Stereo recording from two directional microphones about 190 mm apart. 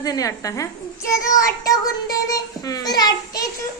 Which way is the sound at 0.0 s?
20° left (ahead or behind).